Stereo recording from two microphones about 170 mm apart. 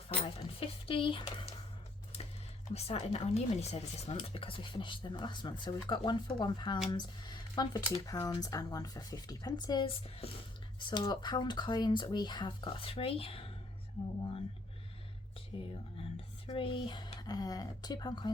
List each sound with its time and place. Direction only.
0.3 s a sound: 30° left (ahead or behind)
2.7 s speech: 35° left (ahead or behind)
15.5 s speech: 30° left (ahead or behind)